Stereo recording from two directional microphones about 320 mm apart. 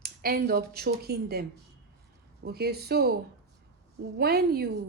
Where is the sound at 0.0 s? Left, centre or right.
Right.